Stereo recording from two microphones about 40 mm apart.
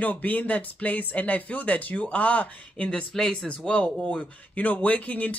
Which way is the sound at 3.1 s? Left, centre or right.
Centre.